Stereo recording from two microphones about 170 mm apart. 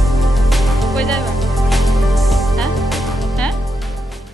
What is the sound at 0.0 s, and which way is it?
Music, centre (ahead or behind).